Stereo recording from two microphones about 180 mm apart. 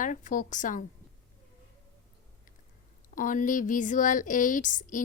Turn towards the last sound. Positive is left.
turn(degrees=45)  # may be behind; listen again after turning